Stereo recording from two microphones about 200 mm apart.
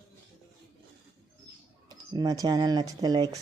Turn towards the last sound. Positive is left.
turn(degrees=-20)  # may be behind; listen again after turning